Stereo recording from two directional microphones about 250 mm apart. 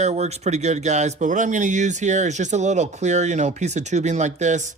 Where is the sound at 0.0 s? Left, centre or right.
Right.